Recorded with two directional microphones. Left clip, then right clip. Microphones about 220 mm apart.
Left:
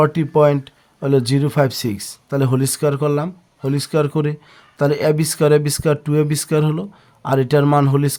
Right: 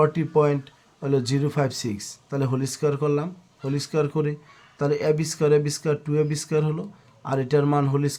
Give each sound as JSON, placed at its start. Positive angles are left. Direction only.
{"t": 0.0, "sound": "speech", "side_deg": 35}